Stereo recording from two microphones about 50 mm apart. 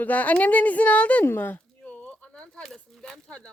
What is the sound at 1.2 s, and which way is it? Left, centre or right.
Speech, left.